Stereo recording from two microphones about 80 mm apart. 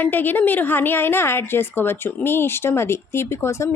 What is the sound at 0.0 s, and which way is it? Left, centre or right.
A woman's voice, left.